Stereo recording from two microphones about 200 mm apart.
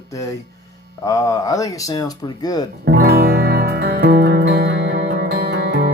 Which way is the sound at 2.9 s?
50° right (ahead or behind).